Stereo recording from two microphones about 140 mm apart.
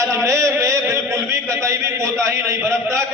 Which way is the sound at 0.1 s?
20° right (ahead or behind).